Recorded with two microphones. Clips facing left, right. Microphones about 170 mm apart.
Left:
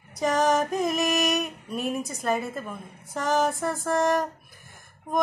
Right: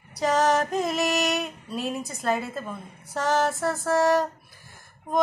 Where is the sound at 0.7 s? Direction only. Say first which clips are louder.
Even; 15° left (ahead or behind).